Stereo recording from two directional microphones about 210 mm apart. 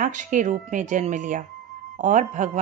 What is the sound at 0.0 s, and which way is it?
Speech, 35° right (ahead or behind).